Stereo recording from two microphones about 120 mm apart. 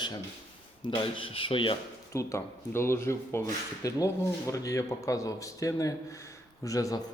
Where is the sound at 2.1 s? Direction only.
25° left (ahead or behind).